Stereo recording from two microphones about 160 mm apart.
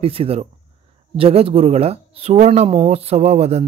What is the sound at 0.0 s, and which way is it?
Speech, 35° right (ahead or behind).